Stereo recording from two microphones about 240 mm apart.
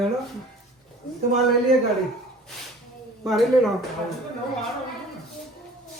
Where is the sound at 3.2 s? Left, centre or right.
Centre.